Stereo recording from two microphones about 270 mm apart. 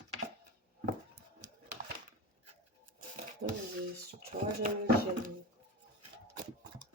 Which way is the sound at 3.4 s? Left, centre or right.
Right.